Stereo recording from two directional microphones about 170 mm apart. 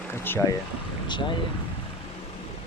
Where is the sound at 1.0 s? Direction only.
25° left (ahead or behind).